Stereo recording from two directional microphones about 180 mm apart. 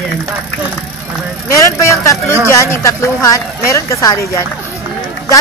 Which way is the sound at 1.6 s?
20° left (ahead or behind).